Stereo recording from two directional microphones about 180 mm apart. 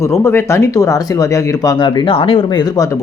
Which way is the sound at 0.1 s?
15° left (ahead or behind).